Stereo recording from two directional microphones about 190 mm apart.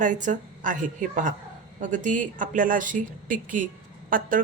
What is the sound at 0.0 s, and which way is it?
A woman's voice, 40° right (ahead or behind).